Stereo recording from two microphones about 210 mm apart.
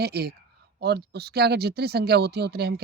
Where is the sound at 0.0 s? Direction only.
50° right (ahead or behind).